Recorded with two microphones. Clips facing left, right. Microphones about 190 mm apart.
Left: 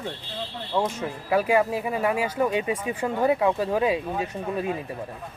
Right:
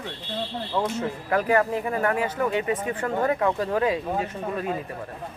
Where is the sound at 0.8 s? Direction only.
10° left (ahead or behind).